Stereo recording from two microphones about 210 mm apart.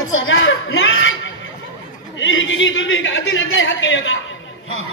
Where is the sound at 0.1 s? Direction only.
65° left (ahead or behind).